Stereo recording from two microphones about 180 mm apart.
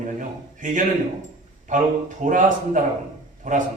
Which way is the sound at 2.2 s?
45° right (ahead or behind).